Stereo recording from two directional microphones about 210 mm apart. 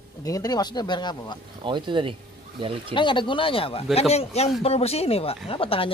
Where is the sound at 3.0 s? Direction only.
25° left (ahead or behind).